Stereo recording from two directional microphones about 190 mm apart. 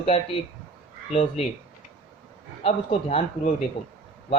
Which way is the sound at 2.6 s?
30° left (ahead or behind).